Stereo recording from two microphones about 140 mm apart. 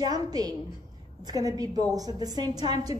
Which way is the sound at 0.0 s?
30° right (ahead or behind).